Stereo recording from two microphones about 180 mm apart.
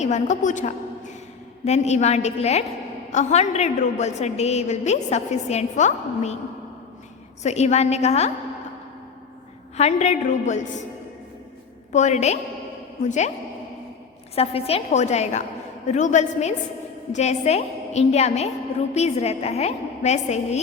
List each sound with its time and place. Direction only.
0.0 s a woman's voice: 40° left (ahead or behind)
7.4 s a woman's voice: 40° left (ahead or behind)
9.7 s a woman's voice: 40° left (ahead or behind)
11.9 s a woman's voice: 40° left (ahead or behind)
14.3 s a woman's voice: 35° left (ahead or behind)